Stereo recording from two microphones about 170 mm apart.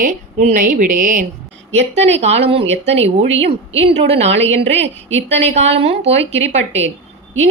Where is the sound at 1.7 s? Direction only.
40° right (ahead or behind).